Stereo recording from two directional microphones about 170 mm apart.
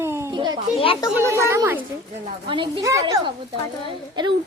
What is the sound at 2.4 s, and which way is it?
Speech, 30° right (ahead or behind).